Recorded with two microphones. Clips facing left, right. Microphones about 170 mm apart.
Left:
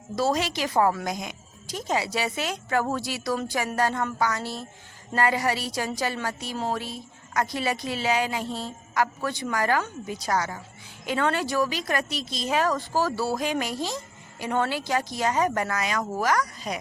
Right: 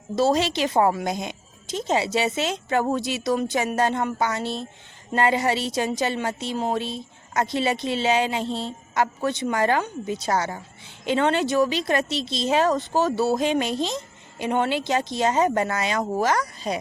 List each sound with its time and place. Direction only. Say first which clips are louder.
0.2 s a woman's voice: right 4 dB; 25° right (ahead or behind)